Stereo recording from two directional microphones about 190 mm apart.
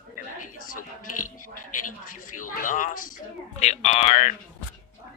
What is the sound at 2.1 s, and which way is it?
A woman's voice, 45° left (ahead or behind).